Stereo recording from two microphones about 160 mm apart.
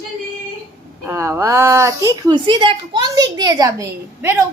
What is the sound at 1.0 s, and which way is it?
A woman's voice, 15° right (ahead or behind).